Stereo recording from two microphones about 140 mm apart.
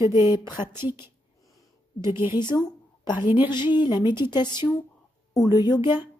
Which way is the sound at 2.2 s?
30° left (ahead or behind).